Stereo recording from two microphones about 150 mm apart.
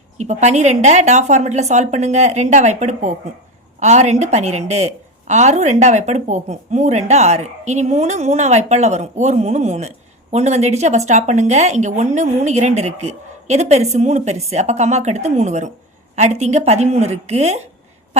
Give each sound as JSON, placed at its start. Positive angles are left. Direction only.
{"t": 0.2, "sound": "speech", "side_deg": -50}